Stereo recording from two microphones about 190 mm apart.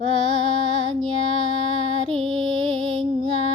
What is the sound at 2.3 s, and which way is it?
Music, 25° right (ahead or behind).